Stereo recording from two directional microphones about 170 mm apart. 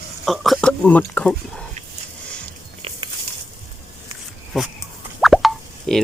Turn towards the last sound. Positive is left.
turn(degrees=0)  # may be behind; listen again after turning